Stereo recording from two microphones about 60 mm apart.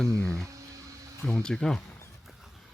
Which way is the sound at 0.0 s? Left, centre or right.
Centre.